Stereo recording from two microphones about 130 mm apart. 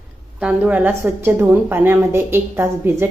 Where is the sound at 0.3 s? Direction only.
10° right (ahead or behind).